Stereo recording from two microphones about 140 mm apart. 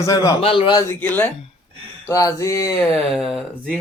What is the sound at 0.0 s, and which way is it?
Speech, 25° left (ahead or behind).